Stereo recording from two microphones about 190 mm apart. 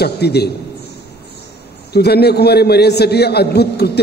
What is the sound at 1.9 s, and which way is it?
A man's voice, 60° left (ahead or behind).